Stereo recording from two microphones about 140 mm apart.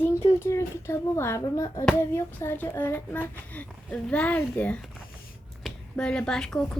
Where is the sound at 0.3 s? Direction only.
20° left (ahead or behind).